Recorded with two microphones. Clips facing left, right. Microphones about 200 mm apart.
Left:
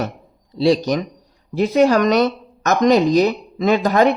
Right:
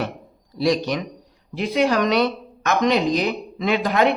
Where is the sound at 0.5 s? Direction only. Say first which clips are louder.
Left 4 dB; 30° left (ahead or behind).